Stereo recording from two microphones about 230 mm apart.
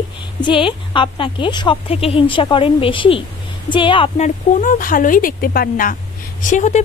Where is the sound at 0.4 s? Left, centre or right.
Left.